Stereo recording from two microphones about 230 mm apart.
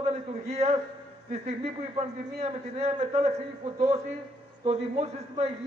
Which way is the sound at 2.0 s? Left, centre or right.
Right.